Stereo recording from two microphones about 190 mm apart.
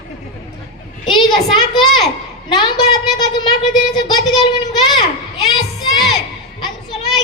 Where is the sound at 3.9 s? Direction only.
20° left (ahead or behind).